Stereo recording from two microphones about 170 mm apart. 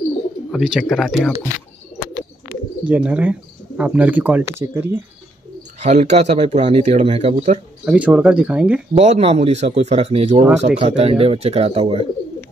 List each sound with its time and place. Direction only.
0.5 s speech: centre (ahead or behind)
2.8 s speech: 10° right (ahead or behind)
5.8 s speech: 40° right (ahead or behind)
7.8 s speech: 5° right (ahead or behind)
8.9 s speech: 40° right (ahead or behind)